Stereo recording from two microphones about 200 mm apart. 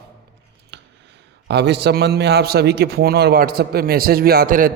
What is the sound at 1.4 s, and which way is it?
A man's voice, 55° right (ahead or behind).